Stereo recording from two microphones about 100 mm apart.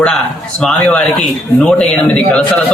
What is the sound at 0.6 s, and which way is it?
A man's voice, 15° left (ahead or behind).